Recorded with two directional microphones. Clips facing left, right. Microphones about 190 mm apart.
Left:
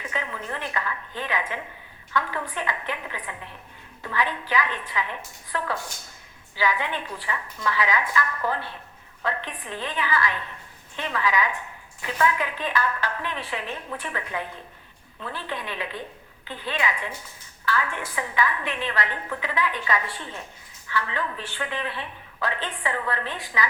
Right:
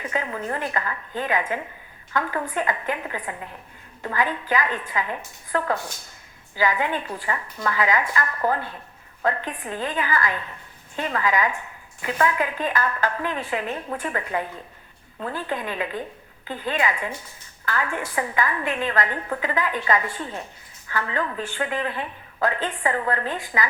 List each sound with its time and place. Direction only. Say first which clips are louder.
0.1 s a woman's voice: right 5 dB; 45° right (ahead or behind)
15.2 s a woman's voice: right 5 dB; 45° right (ahead or behind)